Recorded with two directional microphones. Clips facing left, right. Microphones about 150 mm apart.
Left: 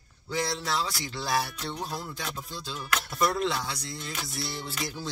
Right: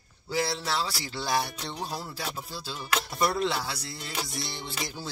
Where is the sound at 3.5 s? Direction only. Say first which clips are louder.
Even; 30° right (ahead or behind).